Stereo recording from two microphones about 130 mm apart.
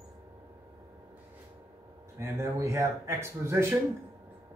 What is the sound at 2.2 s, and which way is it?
Speech, 20° right (ahead or behind).